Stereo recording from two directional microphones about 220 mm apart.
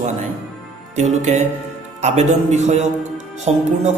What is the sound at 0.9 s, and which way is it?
A man's voice, 30° right (ahead or behind).